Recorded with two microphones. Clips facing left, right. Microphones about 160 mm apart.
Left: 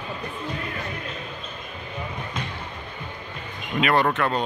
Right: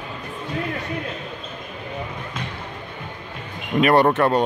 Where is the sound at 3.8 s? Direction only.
40° right (ahead or behind).